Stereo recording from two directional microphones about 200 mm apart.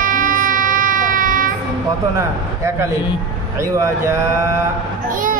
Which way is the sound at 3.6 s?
15° right (ahead or behind).